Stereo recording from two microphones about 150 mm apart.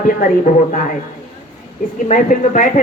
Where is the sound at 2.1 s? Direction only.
60° left (ahead or behind).